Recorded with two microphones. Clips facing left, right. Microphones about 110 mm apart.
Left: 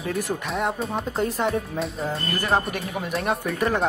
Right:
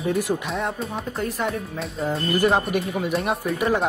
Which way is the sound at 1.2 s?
25° left (ahead or behind).